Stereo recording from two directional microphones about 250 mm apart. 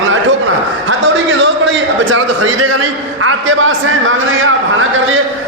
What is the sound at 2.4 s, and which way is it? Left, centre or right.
A man's voice, right.